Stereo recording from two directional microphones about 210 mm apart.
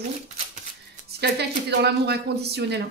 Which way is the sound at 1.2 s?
55° right (ahead or behind).